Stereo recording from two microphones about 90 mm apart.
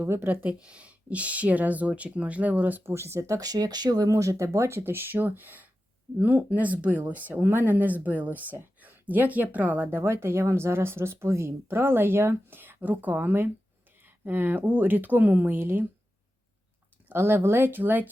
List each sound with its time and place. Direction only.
0.0 s speech: 25° right (ahead or behind)
0.6 s speech: 10° right (ahead or behind)
17.1 s speech: 25° right (ahead or behind)